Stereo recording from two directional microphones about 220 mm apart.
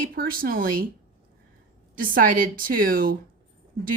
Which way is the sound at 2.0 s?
40° right (ahead or behind).